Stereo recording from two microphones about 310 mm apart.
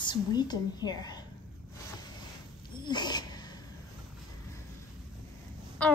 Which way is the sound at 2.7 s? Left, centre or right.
Centre.